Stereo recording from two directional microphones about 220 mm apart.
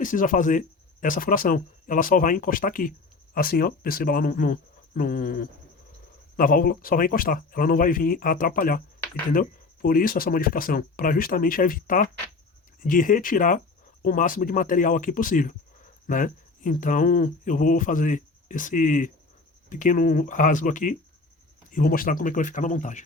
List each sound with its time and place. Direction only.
0.0 s speech: 35° left (ahead or behind)